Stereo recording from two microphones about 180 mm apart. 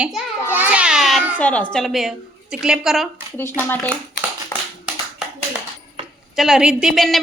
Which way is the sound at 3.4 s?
10° left (ahead or behind).